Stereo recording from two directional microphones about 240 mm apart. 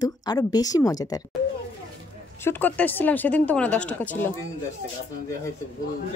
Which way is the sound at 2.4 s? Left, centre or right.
Centre.